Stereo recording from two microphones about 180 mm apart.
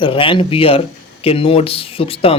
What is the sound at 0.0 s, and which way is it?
A man's voice, 30° left (ahead or behind).